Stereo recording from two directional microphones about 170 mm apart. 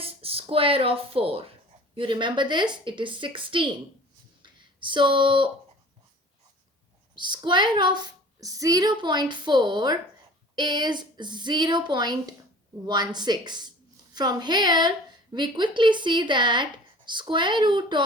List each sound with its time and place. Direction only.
0.0 s a woman's voice: 35° right (ahead or behind)
7.2 s a woman's voice: 25° right (ahead or behind)